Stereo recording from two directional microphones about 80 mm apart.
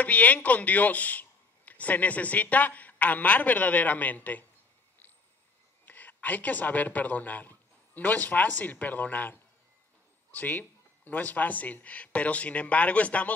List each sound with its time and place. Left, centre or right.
0.0 s a woman's voice: centre
5.9 s a man's voice: left